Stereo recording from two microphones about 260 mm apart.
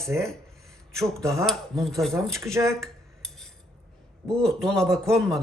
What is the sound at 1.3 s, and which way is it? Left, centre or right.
A man's voice, centre.